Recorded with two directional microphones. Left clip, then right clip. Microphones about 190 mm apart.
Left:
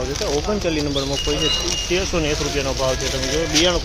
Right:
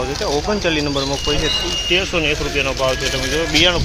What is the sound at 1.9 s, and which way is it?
Speech, 15° left (ahead or behind).